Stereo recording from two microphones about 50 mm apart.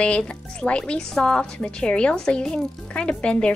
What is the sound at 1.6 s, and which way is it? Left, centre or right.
A woman's voice, left.